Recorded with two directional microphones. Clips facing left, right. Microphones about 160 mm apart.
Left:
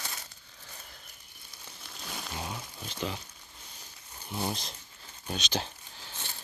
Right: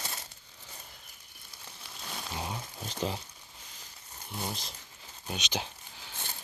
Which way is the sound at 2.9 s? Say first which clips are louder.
Right 2 dB; 35° right (ahead or behind).